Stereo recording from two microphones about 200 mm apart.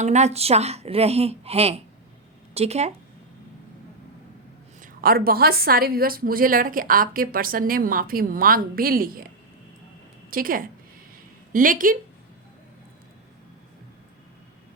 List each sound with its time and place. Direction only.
0.0 s speech: 35° right (ahead or behind)
4.8 s a woman's voice: 45° right (ahead or behind)